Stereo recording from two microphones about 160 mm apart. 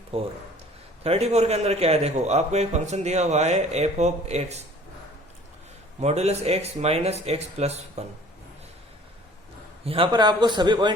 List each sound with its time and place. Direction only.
1.0 s a man's voice: 40° right (ahead or behind)
6.0 s speech: 40° right (ahead or behind)
9.8 s a man's voice: 35° right (ahead or behind)